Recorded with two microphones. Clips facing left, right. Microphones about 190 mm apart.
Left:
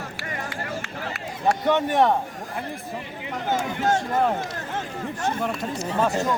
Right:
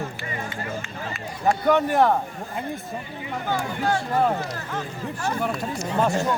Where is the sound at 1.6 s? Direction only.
Centre (ahead or behind).